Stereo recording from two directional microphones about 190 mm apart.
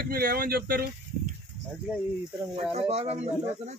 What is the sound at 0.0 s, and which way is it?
Speech, 50° right (ahead or behind).